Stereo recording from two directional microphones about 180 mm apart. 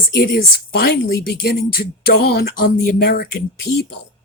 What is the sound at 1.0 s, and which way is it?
Speech, 60° left (ahead or behind).